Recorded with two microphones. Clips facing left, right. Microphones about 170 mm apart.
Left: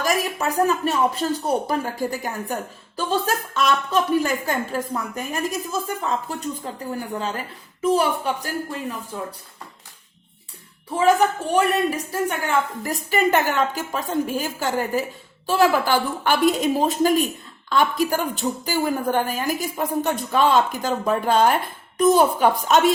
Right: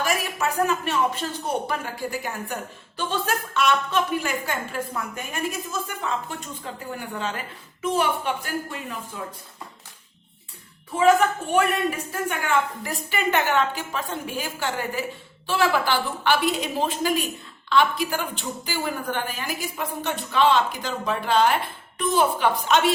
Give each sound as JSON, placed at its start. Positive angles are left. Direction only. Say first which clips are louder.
{"t": 0.0, "sound": "a woman's voice", "louder": "left 3 dB", "side_deg": 40}
{"t": 10.9, "sound": "a woman's voice", "louder": "left 1 dB", "side_deg": 35}